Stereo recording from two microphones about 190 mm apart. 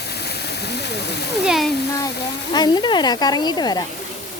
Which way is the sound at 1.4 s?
Centre (ahead or behind).